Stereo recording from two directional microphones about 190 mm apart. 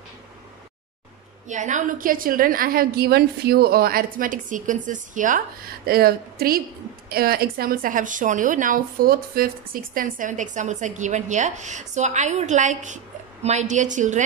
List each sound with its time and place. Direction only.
1.5 s a woman's voice: 40° right (ahead or behind)
5.9 s a woman's voice: 50° right (ahead or behind)